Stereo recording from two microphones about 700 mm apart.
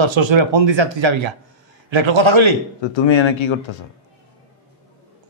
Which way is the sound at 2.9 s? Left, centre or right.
Left.